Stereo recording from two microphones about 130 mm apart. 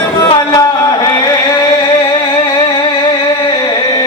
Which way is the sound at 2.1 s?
35° left (ahead or behind).